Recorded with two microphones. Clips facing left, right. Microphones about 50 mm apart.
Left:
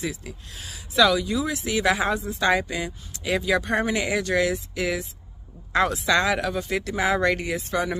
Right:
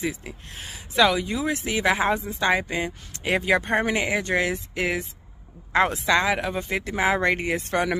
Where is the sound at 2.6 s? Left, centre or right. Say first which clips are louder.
Right 2 dB; right.